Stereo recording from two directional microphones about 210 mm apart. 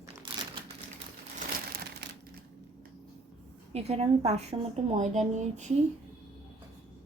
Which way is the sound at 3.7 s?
30° right (ahead or behind).